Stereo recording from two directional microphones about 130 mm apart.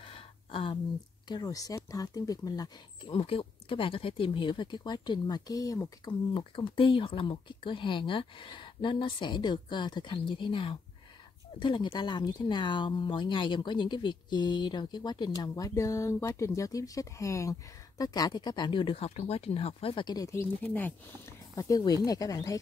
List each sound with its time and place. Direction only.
0.0 s a sound: 45° left (ahead or behind)
1.3 s speech: 30° left (ahead or behind)
3.1 s speech: 50° left (ahead or behind); by 6.1 s 25° left (ahead or behind)
6.3 s speech: 40° left (ahead or behind)
20.6 s speech: 15° left (ahead or behind)
21.5 s speech: 30° left (ahead or behind)